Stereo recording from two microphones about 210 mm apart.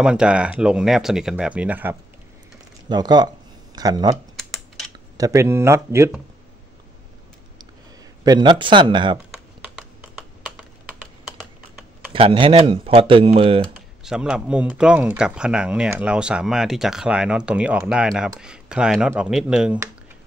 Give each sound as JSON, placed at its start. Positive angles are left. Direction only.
{"t": 0.0, "sound": "speech", "side_deg": -5}
{"t": 2.9, "sound": "speech", "side_deg": -20}
{"t": 4.4, "sound": "typing", "side_deg": 0}
{"t": 5.1, "sound": "speech", "side_deg": -15}
{"t": 8.2, "sound": "speech", "side_deg": -20}
{"t": 9.3, "sound": "computer keyboard", "side_deg": -5}
{"t": 12.1, "sound": "speech", "side_deg": -25}
{"t": 14.0, "sound": "speech", "side_deg": -5}